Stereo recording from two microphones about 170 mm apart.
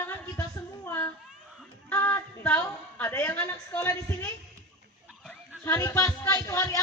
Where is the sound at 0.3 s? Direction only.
15° left (ahead or behind).